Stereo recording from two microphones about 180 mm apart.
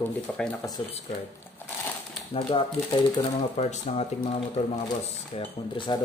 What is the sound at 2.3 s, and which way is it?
Speech, 30° left (ahead or behind).